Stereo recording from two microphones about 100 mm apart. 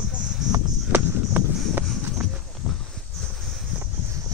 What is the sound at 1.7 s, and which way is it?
Clip-clop, 20° right (ahead or behind).